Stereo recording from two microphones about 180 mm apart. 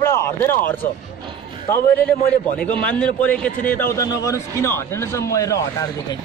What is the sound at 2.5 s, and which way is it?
A man's voice, 10° left (ahead or behind).